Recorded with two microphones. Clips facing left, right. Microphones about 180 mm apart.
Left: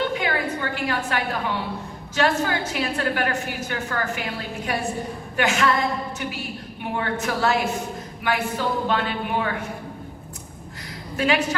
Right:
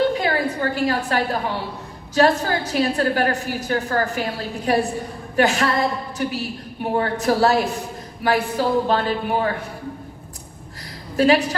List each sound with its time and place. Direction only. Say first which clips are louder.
0.0 s a sound: right 5 dB; 35° right (ahead or behind)
2.1 s a woman's voice: right 4 dB; 35° right (ahead or behind)
11.2 s a woman's voice: right 6 dB; 35° right (ahead or behind)